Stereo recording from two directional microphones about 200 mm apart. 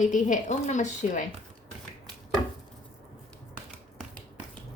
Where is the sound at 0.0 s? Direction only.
40° left (ahead or behind).